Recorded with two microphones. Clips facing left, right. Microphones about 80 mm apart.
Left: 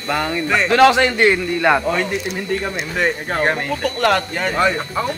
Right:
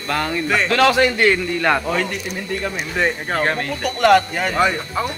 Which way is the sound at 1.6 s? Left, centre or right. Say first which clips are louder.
Left 2 dB; centre.